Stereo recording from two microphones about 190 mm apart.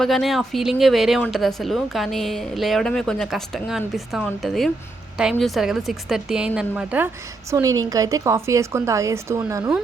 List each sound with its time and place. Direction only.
0.0 s speech: centre (ahead or behind)
7.5 s a woman's voice: 20° right (ahead or behind)